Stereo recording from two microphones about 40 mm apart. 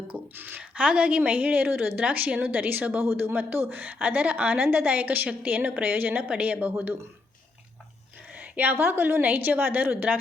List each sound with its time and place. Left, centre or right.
0.3 s speech: right
0.8 s a woman's voice: right
2.0 s a woman's voice: right
3.0 s speech: right
3.8 s a woman's voice: right
4.6 s speech: right
4.9 s a woman's voice: right
5.8 s a woman's voice: right
6.4 s a woman's voice: right
8.4 s a sound: right
8.7 s a woman's voice: right